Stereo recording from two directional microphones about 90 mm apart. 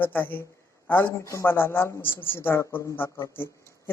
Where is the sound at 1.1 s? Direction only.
35° left (ahead or behind).